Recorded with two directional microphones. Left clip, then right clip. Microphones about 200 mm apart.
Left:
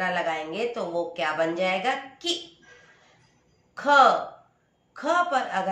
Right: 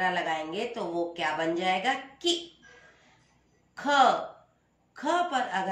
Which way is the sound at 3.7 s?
15° left (ahead or behind).